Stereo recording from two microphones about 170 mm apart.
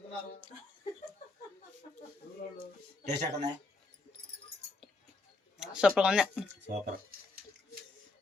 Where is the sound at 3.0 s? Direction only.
75° right (ahead or behind).